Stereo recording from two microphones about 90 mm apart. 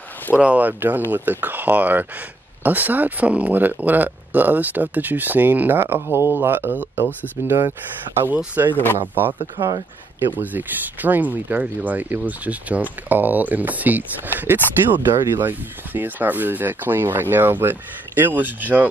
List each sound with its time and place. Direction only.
0.4 s speech: 15° right (ahead or behind)
7.4 s speech: 35° right (ahead or behind)
8.6 s speech: 30° right (ahead or behind)
9.6 s speech: 90° right
10.2 s speech: 20° right (ahead or behind)